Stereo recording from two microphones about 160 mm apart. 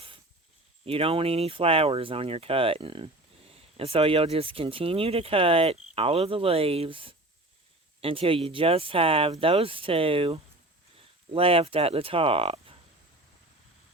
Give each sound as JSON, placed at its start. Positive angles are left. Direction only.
{"t": 0.9, "sound": "speech", "side_deg": -35}